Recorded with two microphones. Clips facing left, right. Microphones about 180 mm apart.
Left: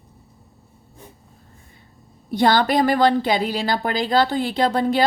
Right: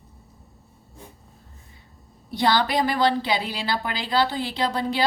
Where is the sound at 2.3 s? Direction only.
50° left (ahead or behind).